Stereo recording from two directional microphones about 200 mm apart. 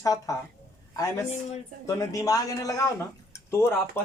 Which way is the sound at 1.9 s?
15° left (ahead or behind).